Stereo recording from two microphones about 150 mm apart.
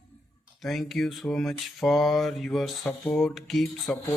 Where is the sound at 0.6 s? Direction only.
Centre (ahead or behind).